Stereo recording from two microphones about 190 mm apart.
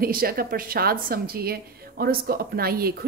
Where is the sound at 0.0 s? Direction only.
50° right (ahead or behind).